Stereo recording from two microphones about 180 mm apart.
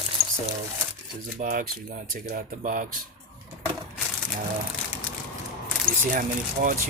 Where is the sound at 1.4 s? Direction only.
50° right (ahead or behind).